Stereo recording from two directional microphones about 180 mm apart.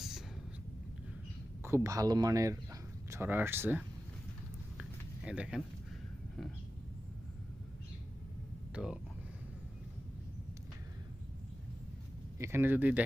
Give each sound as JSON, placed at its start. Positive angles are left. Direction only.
{"t": 1.6, "sound": "speech", "side_deg": -15}
{"t": 4.8, "sound": "a sound", "side_deg": -5}
{"t": 8.7, "sound": "speech", "side_deg": -5}
{"t": 12.4, "sound": "speech", "side_deg": -15}